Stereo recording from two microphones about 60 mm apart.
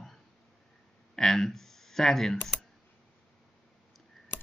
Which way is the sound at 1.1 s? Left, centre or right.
Centre.